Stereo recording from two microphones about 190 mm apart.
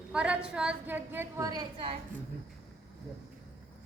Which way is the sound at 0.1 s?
5° right (ahead or behind).